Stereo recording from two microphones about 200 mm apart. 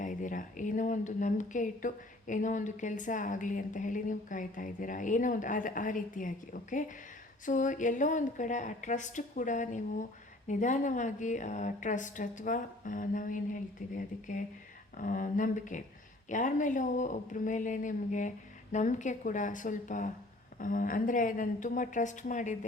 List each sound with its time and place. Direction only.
0.0 s speech: 40° left (ahead or behind)